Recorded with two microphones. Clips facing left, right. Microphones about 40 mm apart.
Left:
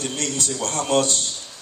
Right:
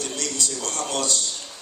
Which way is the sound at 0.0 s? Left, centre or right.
Left.